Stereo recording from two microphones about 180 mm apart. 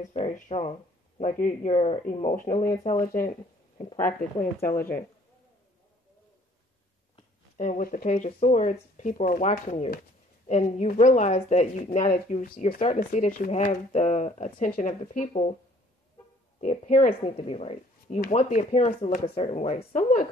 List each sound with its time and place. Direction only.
0.1 s speech: 40° left (ahead or behind)
2.8 s speech: 35° left (ahead or behind)
4.6 s speech: 10° left (ahead or behind)
7.5 s speech: 45° left (ahead or behind)
16.5 s speech: 40° left (ahead or behind)